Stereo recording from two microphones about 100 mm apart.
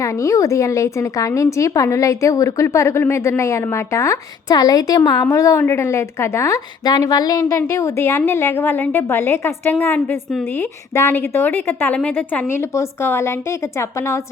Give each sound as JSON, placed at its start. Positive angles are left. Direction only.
{"t": 0.0, "sound": "a woman's voice", "side_deg": 30}